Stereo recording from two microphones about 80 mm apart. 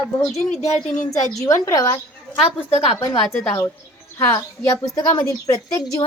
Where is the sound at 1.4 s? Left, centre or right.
Left.